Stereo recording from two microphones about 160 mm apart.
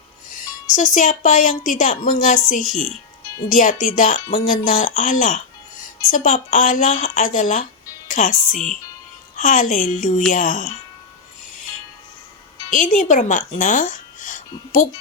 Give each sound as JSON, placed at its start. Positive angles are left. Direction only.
{"t": 0.3, "sound": "speech", "side_deg": 55}
{"t": 12.7, "sound": "speech", "side_deg": 55}